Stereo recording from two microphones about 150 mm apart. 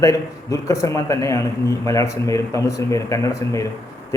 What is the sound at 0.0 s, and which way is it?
A man's voice, 20° left (ahead or behind).